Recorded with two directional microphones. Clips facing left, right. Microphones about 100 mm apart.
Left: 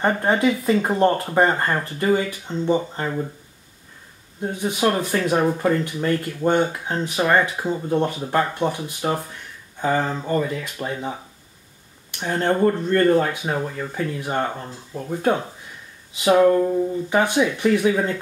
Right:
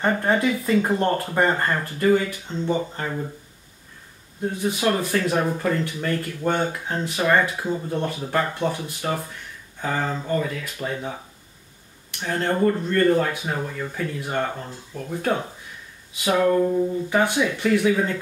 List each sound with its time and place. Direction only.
0.0 s speech: 20° left (ahead or behind)
4.4 s speech: 20° left (ahead or behind)
12.2 s speech: 20° left (ahead or behind)
17.1 s speech: 20° left (ahead or behind)